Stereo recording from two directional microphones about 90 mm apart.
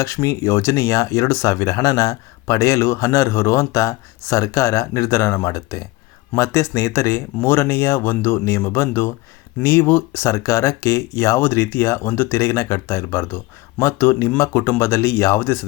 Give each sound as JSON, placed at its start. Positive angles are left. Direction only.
{"t": 0.0, "sound": "speech", "side_deg": 30}